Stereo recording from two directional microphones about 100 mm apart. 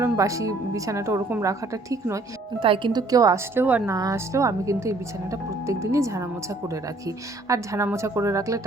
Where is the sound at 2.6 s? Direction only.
60° right (ahead or behind).